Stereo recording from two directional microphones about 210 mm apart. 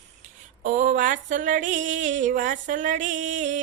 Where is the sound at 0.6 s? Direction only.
35° right (ahead or behind).